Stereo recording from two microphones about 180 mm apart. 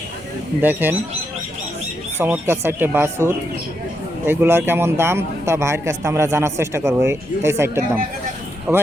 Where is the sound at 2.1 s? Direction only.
10° right (ahead or behind).